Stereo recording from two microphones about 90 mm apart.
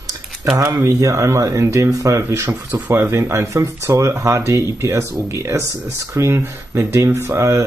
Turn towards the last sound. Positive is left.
turn(degrees=-35)  # may be behind; listen again after turning